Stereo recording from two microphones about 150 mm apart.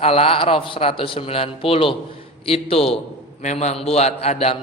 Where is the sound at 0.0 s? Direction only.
40° left (ahead or behind).